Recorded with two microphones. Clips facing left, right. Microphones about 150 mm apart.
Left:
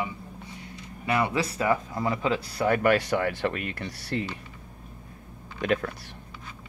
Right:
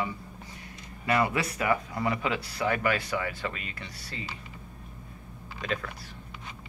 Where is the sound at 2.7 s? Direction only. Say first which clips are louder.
Left 7 dB; 55° left (ahead or behind).